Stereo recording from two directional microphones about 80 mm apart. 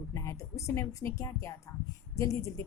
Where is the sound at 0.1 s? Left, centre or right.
Left.